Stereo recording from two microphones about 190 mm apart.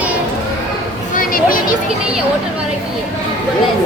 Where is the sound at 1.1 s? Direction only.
45° left (ahead or behind).